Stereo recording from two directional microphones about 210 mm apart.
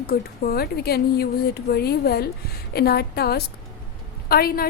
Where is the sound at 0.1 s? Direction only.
45° left (ahead or behind).